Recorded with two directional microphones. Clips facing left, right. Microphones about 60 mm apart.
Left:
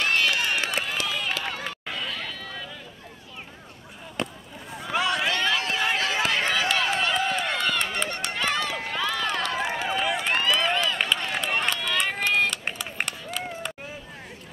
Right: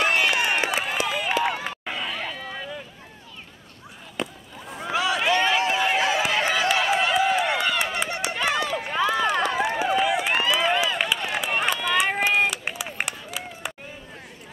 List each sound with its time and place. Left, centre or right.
0.0 s crowd: centre
0.7 s run: centre
4.2 s a sound: centre
5.8 s run: centre
8.8 s run: centre
9.8 s run: centre